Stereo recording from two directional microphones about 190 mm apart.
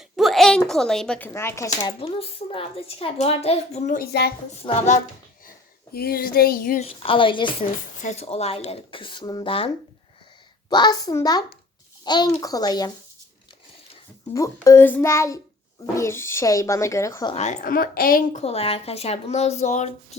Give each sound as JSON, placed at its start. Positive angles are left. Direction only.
{"t": 0.2, "sound": "speech", "side_deg": 0}
{"t": 2.0, "sound": "speech", "side_deg": 30}
{"t": 4.1, "sound": "a woman's voice", "side_deg": 55}
{"t": 4.6, "sound": "speech", "side_deg": 35}
{"t": 5.5, "sound": "speech", "side_deg": 55}
{"t": 6.8, "sound": "speech", "side_deg": 30}
{"t": 14.3, "sound": "speech", "side_deg": 15}
{"t": 17.3, "sound": "speech", "side_deg": 40}